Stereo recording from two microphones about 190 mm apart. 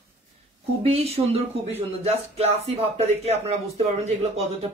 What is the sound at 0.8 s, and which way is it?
Speech, 30° right (ahead or behind).